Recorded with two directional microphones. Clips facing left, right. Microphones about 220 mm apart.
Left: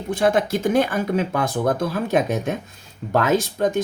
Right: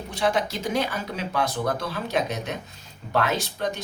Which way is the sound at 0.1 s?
50° left (ahead or behind).